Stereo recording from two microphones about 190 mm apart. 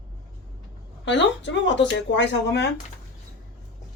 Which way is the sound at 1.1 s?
70° left (ahead or behind).